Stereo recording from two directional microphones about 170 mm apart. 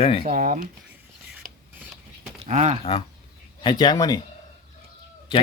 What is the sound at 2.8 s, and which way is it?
Speech, 30° left (ahead or behind).